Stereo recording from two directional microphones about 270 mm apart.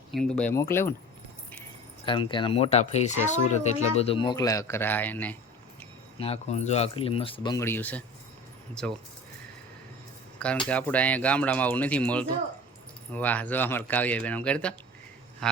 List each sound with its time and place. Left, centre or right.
0.1 s speech: centre
2.0 s speech: centre
6.1 s speech: left; by 9.0 s centre
10.4 s speech: centre